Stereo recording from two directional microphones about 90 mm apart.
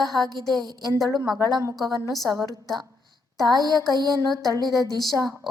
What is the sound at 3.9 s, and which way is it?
Music, 45° right (ahead or behind).